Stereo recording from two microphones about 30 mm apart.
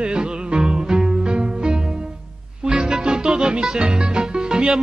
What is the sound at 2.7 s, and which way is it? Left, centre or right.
Music, right.